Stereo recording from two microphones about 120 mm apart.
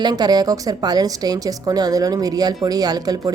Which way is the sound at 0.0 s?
35° right (ahead or behind).